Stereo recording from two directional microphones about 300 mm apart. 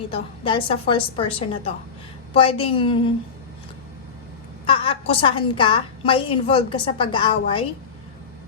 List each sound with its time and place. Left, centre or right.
0.1 s a woman's voice: centre
4.6 s a woman's voice: centre